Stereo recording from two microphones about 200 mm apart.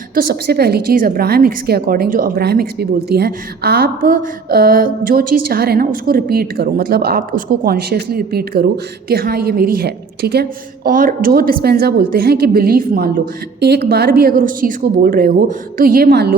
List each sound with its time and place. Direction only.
0.1 s a woman's voice: 45° right (ahead or behind)